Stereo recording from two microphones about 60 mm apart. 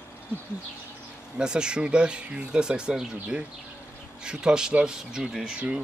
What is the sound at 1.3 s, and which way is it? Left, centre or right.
Speech, centre.